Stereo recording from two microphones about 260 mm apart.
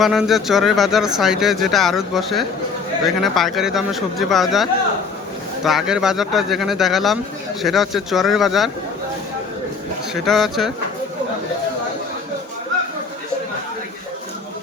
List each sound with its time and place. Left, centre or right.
0.0 s speech: centre
10.2 s speech: centre